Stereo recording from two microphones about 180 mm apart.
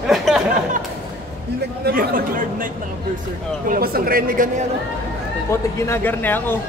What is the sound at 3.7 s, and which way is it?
Speech, 55° right (ahead or behind).